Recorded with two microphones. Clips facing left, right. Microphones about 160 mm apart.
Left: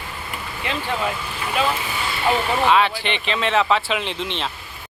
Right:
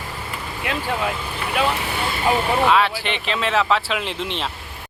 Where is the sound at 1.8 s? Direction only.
65° right (ahead or behind).